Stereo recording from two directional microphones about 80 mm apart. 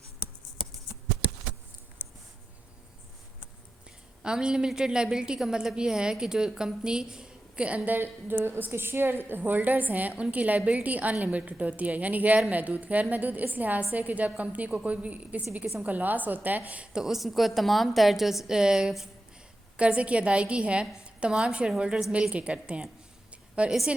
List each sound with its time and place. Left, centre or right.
4.2 s a woman's voice: centre